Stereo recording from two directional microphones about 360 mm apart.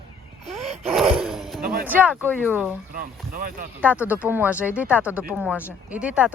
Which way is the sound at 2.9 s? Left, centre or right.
Right.